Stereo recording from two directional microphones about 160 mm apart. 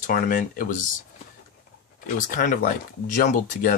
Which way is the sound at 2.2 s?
60° left (ahead or behind).